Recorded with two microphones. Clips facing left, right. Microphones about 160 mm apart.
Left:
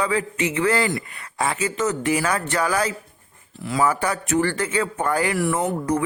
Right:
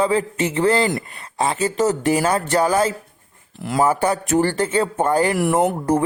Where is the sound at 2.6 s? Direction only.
25° right (ahead or behind).